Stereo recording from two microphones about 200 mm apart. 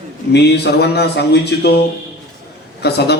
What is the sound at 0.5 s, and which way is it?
A man's voice, 55° left (ahead or behind).